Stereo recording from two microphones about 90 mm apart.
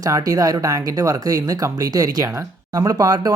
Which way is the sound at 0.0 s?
40° right (ahead or behind).